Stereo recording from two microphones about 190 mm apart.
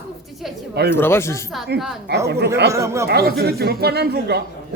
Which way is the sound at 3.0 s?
55° right (ahead or behind).